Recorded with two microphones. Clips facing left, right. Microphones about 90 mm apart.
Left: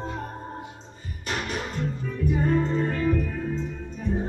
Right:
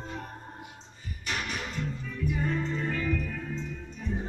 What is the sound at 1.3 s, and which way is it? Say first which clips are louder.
Music: left 4 dB; 35° left (ahead or behind).